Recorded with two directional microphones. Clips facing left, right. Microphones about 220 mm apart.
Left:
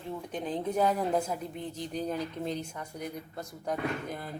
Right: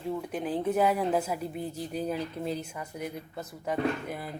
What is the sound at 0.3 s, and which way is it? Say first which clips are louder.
A woman's voice: right 1 dB; 5° right (ahead or behind).